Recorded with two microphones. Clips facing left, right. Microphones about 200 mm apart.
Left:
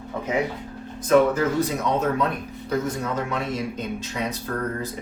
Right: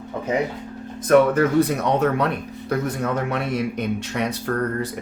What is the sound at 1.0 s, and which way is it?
Speech, 60° right (ahead or behind).